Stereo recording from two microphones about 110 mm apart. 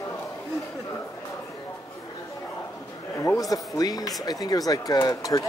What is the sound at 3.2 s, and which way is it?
Speech, 30° left (ahead or behind).